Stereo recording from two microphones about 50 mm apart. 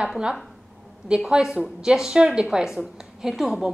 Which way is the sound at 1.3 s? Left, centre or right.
Centre.